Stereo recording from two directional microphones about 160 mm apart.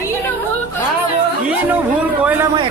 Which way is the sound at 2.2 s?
10° right (ahead or behind).